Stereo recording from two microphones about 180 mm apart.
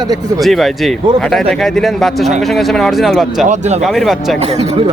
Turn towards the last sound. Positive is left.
turn(degrees=-35)  # may be behind; listen again after turning